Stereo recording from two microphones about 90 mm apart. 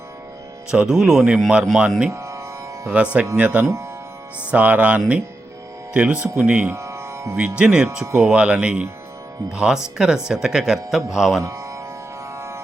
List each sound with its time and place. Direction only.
0.7 s speech: 10° right (ahead or behind)
2.0 s music: 30° right (ahead or behind)
2.9 s speech: 15° right (ahead or behind)
6.7 s music: 30° right (ahead or behind)
7.6 s speech: 10° right (ahead or behind)
8.0 s speech: 25° right (ahead or behind)
8.3 s speech: 10° right (ahead or behind)
11.4 s music: 40° right (ahead or behind)